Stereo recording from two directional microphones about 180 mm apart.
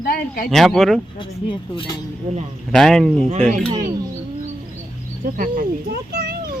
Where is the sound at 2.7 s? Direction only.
Centre (ahead or behind).